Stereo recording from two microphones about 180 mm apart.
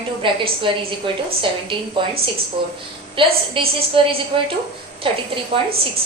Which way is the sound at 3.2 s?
30° right (ahead or behind).